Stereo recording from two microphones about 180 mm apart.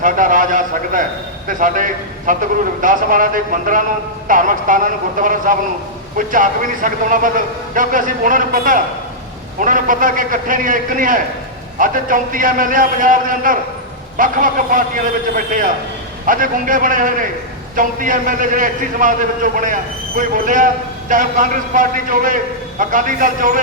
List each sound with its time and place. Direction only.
0.0 s a man's voice: 45° right (ahead or behind)